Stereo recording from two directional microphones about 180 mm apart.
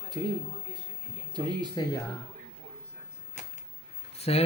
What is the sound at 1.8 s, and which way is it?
Speech, 25° left (ahead or behind).